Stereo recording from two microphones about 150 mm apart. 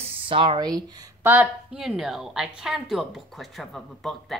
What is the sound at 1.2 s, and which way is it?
A woman's voice, 10° right (ahead or behind).